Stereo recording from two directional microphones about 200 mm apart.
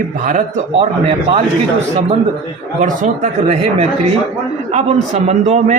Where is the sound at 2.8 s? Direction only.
35° right (ahead or behind).